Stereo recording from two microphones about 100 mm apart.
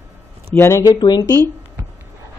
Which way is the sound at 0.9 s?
40° left (ahead or behind).